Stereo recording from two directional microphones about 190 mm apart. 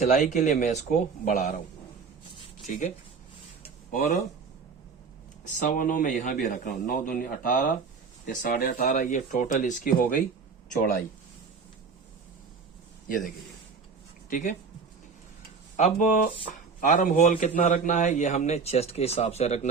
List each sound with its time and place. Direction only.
0.0 s a man's voice: 40° left (ahead or behind)
2.6 s a man's voice: 45° left (ahead or behind)
3.9 s a man's voice: 40° left (ahead or behind)
5.5 s a man's voice: 45° left (ahead or behind)
14.3 s speech: 40° left (ahead or behind)
15.7 s a man's voice: 40° left (ahead or behind)